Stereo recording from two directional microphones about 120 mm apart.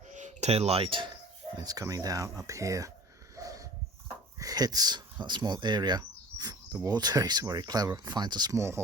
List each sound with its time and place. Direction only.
0.1 s a sound: 75° right (ahead or behind); by 1.0 s 45° right (ahead or behind)
1.5 s speech: 30° right (ahead or behind)
3.3 s wheeze: 30° right (ahead or behind)
4.4 s speech: 30° right (ahead or behind)